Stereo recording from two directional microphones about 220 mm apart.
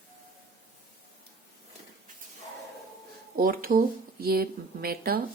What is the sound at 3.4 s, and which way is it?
Speech, 40° right (ahead or behind).